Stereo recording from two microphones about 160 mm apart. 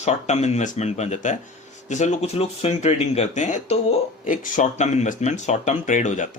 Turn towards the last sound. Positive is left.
turn(degrees=50)  # may be behind; listen again after turning